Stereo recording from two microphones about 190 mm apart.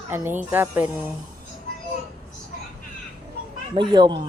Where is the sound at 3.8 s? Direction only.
25° right (ahead or behind).